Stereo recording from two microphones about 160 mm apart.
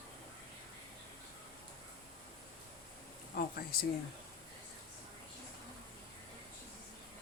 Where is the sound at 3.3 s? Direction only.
70° left (ahead or behind).